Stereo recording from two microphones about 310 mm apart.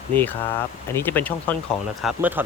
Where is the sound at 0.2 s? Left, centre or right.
Centre.